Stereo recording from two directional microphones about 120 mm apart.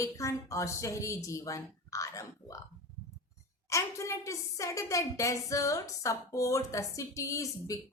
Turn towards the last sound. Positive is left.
turn(degrees=25)  # may be behind; listen again after turning